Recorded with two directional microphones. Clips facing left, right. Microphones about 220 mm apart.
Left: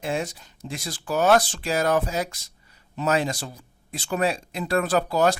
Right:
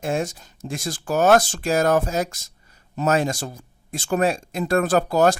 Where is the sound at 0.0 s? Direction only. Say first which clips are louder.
Right 3 dB; 45° right (ahead or behind).